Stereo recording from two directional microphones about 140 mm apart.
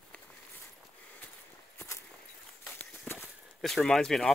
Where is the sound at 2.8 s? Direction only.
15° left (ahead or behind).